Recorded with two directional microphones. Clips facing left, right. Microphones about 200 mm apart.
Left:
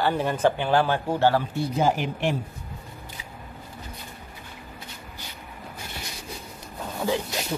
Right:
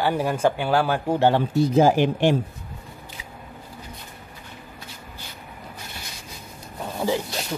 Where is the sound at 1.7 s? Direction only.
90° right.